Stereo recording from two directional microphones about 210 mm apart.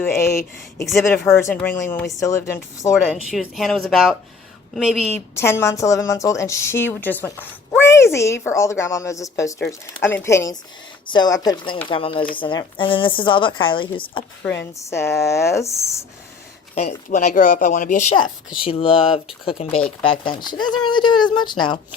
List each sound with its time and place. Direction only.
0.0 s a woman's voice: 15° left (ahead or behind)
2.9 s a woman's voice: centre (ahead or behind); by 13.8 s 25° left (ahead or behind)
14.4 s a woman's voice: 10° left (ahead or behind)
16.7 s speech: 35° left (ahead or behind)
18.2 s speech: 25° left (ahead or behind)